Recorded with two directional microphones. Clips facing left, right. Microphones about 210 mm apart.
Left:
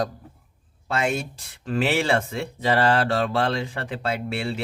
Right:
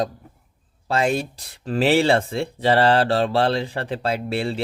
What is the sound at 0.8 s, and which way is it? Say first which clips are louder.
Speech: right 4 dB; 35° right (ahead or behind).